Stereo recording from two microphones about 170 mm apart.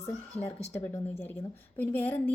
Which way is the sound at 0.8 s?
15° left (ahead or behind).